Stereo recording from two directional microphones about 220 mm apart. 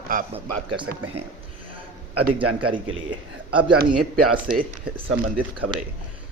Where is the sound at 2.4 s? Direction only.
90° right.